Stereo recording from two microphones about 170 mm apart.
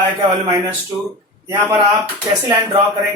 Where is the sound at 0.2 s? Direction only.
20° right (ahead or behind).